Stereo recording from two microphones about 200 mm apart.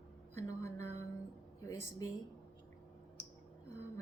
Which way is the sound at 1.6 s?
15° left (ahead or behind).